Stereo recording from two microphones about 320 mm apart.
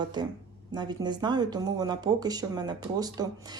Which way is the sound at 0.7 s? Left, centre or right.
Centre.